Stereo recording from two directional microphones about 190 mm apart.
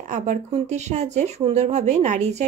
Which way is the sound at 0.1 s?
40° right (ahead or behind).